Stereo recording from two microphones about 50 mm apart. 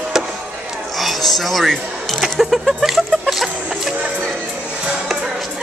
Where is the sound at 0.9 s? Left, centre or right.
Centre.